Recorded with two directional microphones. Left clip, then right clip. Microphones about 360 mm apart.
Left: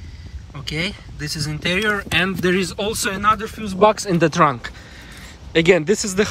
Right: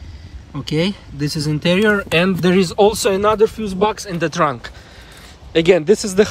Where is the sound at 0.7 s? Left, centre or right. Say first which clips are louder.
Right 4 dB; centre.